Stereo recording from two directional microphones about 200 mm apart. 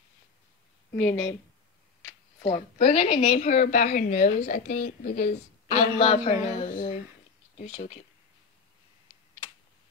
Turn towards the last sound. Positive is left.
turn(degrees=30)  # may be behind; listen again after turning